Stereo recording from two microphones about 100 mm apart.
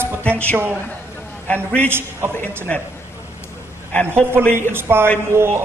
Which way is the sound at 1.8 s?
25° right (ahead or behind).